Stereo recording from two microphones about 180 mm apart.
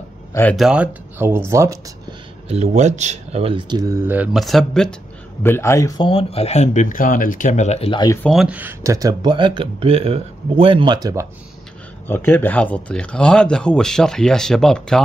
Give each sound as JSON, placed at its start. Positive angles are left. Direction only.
{"t": 0.3, "sound": "speech", "side_deg": 10}
{"t": 0.6, "sound": "speech", "side_deg": -5}
{"t": 2.4, "sound": "speech", "side_deg": -35}
{"t": 5.4, "sound": "speech", "side_deg": 15}
{"t": 8.3, "sound": "speech", "side_deg": -5}
{"t": 12.1, "sound": "speech", "side_deg": 10}